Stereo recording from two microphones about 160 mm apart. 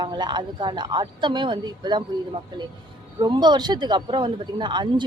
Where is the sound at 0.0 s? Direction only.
30° right (ahead or behind).